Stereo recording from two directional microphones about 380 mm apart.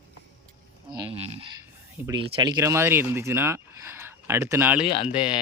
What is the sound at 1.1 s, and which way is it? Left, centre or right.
Speech, centre.